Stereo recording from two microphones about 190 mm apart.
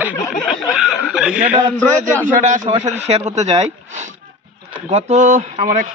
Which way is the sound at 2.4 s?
40° right (ahead or behind).